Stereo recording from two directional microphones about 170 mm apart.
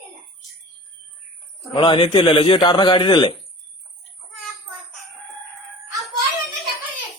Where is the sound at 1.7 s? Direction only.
30° left (ahead or behind).